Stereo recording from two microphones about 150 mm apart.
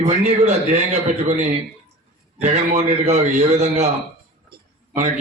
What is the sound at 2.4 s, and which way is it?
A man's voice, 45° right (ahead or behind).